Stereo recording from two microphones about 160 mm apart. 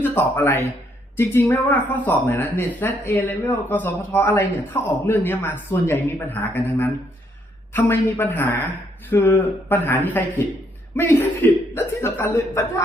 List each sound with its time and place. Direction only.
0.0 s speech: 10° left (ahead or behind)